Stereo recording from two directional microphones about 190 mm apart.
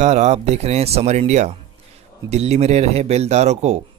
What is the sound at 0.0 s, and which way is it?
Speech, 35° right (ahead or behind).